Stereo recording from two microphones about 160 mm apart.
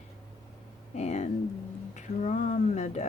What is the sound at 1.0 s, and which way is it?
Speech, 45° left (ahead or behind).